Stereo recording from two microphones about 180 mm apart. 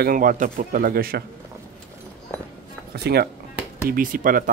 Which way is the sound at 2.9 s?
60° right (ahead or behind).